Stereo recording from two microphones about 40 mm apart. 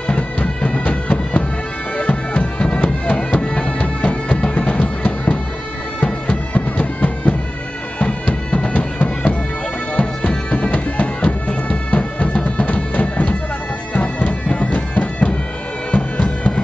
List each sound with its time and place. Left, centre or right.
0.0 s music: left
5.9 s bagpipes: left
9.9 s music: left
13.9 s bagpipes: left